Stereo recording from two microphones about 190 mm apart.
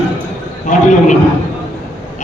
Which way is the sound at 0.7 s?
40° left (ahead or behind).